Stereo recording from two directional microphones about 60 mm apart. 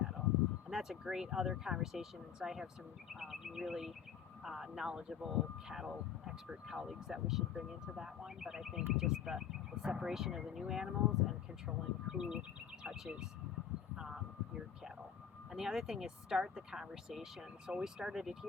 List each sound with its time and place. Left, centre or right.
0.7 s speech: centre
13.9 s a sound: centre
15.5 s speech: centre